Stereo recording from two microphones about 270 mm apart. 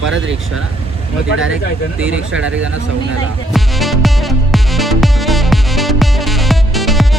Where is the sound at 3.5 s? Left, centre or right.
Centre.